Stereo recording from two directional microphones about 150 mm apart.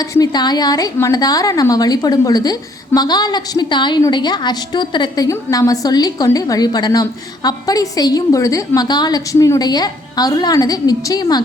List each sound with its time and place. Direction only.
0.0 s a woman's voice: 25° left (ahead or behind)